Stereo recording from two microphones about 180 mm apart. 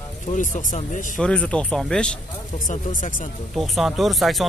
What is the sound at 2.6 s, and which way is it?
Speech, 45° left (ahead or behind).